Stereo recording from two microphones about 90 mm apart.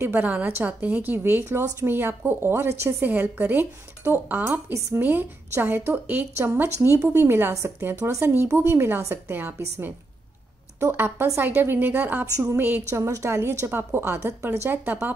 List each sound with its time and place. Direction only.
0.0 s a woman's voice: 20° right (ahead or behind)
7.5 s a woman's voice: 35° right (ahead or behind)
12.4 s a woman's voice: 30° right (ahead or behind)